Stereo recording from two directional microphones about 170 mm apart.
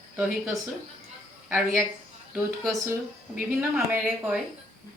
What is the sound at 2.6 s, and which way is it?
Speech, 20° right (ahead or behind).